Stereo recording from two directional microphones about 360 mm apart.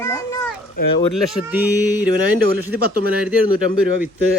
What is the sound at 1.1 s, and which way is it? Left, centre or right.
Speech, left.